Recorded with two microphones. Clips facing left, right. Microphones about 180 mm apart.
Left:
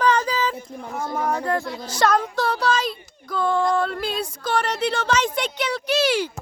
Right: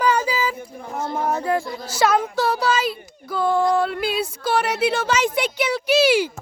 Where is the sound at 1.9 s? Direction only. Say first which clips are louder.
Right 1 dB; 5° right (ahead or behind).